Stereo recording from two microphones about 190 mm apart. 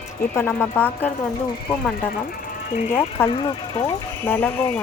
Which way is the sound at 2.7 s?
40° left (ahead or behind).